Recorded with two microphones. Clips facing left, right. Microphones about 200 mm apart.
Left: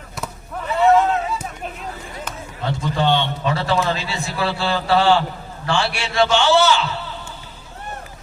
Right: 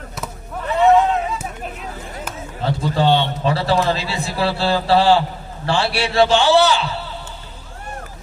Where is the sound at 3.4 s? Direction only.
35° right (ahead or behind).